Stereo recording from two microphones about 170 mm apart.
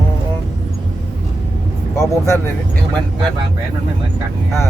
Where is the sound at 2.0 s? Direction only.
20° left (ahead or behind).